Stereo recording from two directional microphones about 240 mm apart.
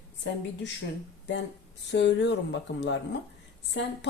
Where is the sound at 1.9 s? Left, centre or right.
Left.